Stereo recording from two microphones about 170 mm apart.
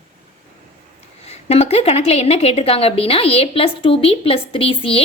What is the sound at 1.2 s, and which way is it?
A woman's voice, 40° left (ahead or behind).